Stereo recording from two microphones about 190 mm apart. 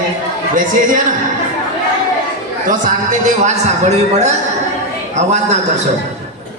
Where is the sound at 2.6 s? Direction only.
40° right (ahead or behind).